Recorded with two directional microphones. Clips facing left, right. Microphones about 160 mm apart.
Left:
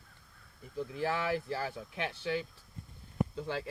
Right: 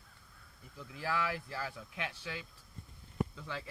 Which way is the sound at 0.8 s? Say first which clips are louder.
Left 4 dB; 25° left (ahead or behind).